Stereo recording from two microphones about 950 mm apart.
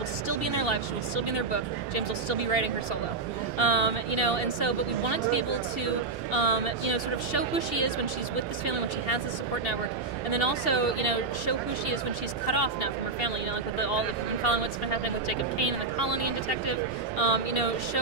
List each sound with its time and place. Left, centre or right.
0.3 s speech: left
6.9 s speech: left
10.3 s speech: left
17.2 s speech: left